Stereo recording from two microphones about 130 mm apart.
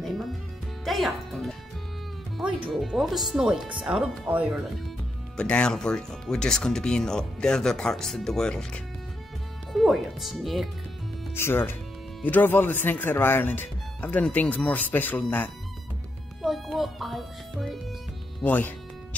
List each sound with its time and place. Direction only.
0.0 s music: centre (ahead or behind)
2.3 s speech: 5° right (ahead or behind)
5.4 s speech: 5° left (ahead or behind)
11.3 s speech: 15° left (ahead or behind)
16.4 s speech: centre (ahead or behind)
18.4 s speech: 15° left (ahead or behind)